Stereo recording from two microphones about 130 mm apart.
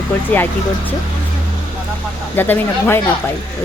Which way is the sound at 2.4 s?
15° left (ahead or behind).